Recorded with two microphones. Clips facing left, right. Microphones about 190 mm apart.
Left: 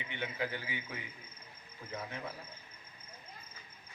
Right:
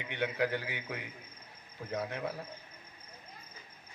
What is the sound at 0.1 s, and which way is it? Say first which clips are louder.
A man's voice: right 7 dB; 70° right (ahead or behind).